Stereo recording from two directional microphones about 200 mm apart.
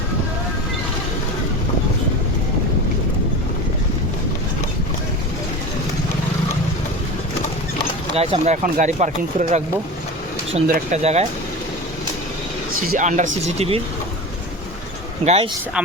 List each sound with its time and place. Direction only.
8.1 s speech: 30° right (ahead or behind)
10.7 s speech: 45° right (ahead or behind)
11.0 s speech: 35° right (ahead or behind)
13.0 s speech: 35° right (ahead or behind)
15.2 s speech: 35° right (ahead or behind)